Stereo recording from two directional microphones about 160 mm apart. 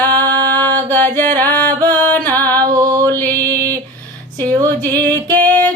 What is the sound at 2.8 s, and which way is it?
Mantra, 20° right (ahead or behind).